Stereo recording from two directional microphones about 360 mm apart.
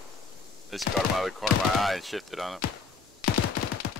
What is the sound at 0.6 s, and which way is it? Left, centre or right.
Speech, centre.